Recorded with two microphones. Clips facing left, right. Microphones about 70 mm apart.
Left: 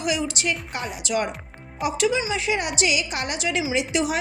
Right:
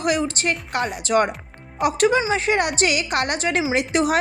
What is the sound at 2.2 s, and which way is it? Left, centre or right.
A woman's voice, right.